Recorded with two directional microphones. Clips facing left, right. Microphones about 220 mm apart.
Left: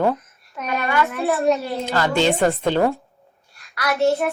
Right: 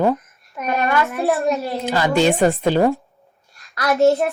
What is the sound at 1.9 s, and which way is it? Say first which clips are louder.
A woman's voice: right 2 dB; 15° right (ahead or behind).